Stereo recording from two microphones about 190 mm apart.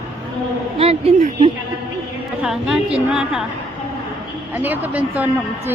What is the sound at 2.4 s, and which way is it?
A woman's voice, 5° right (ahead or behind).